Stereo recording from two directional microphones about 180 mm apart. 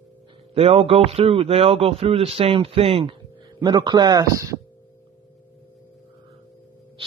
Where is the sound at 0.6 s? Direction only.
35° right (ahead or behind).